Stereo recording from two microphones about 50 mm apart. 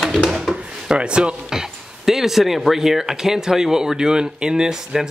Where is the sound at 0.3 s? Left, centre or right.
Centre.